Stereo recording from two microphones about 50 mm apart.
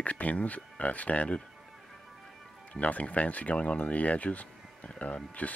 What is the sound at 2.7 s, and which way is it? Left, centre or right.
Speech, left.